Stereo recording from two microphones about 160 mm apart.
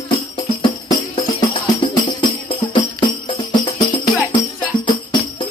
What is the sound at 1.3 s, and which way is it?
Music, 30° left (ahead or behind).